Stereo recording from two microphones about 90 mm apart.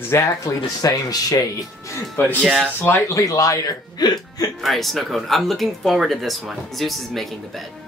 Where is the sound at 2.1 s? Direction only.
20° left (ahead or behind).